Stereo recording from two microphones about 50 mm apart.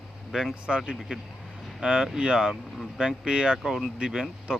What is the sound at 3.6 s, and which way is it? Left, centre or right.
Speech, centre.